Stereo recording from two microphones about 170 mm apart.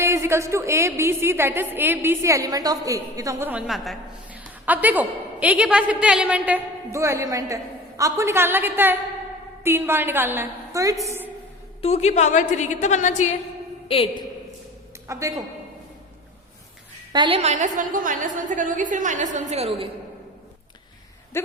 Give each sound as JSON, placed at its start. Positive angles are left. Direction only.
{"t": 0.0, "sound": "a woman's voice", "side_deg": -15}
{"t": 11.8, "sound": "a woman's voice", "side_deg": 40}
{"t": 13.8, "sound": "a woman's voice", "side_deg": 30}
{"t": 15.0, "sound": "a woman's voice", "side_deg": -20}
{"t": 17.1, "sound": "a woman's voice", "side_deg": -30}
{"t": 21.3, "sound": "speech", "side_deg": 15}